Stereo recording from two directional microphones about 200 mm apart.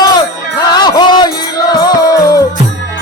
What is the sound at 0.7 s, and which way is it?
Music, 20° left (ahead or behind).